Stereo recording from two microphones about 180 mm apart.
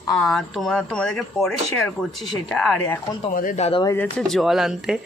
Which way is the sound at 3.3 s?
45° left (ahead or behind).